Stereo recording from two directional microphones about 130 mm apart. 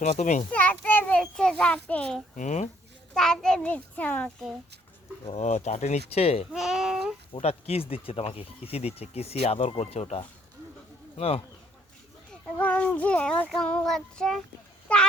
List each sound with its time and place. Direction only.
0.0 s speech: 65° left (ahead or behind)
0.5 s a sound: 10° left (ahead or behind)
2.3 s speech: 70° left (ahead or behind)
3.2 s child singing: 5° left (ahead or behind)
5.2 s speech: 55° left (ahead or behind)
6.5 s speech: 5° right (ahead or behind)
7.3 s speech: 50° left (ahead or behind)
11.2 s speech: 50° left (ahead or behind)
12.5 s child singing: 10° left (ahead or behind)